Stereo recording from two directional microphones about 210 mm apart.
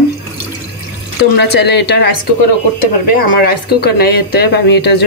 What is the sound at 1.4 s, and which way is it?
Speech, 55° left (ahead or behind).